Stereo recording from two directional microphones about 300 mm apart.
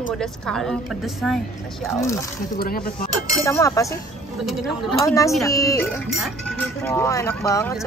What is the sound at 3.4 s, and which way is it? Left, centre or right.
Speech, centre.